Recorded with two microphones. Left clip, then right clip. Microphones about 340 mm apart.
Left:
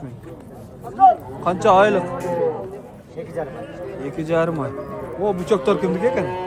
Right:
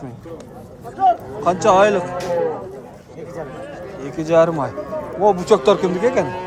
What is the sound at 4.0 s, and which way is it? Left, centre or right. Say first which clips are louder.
Speech: right 6 dB; centre.